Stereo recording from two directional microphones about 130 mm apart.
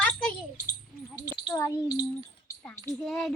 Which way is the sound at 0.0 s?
10° left (ahead or behind).